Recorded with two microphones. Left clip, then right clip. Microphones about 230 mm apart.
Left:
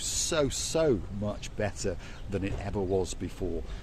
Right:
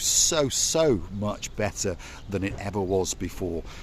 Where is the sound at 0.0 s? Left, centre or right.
Right.